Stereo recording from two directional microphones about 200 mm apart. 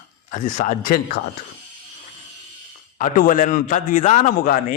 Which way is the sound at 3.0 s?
40° left (ahead or behind).